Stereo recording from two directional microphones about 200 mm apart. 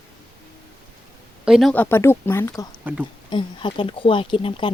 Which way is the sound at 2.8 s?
10° right (ahead or behind).